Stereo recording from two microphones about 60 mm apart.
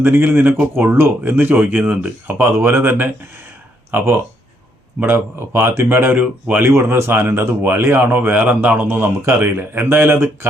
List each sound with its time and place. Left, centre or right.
0.0 s speech: right
2.4 s speech: right